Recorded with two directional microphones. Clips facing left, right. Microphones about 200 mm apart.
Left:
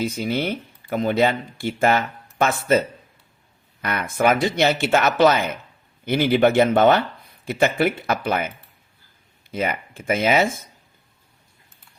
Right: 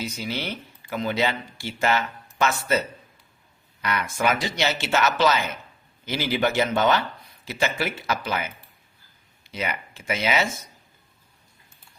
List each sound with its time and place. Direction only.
0.0 s speech: 55° left (ahead or behind)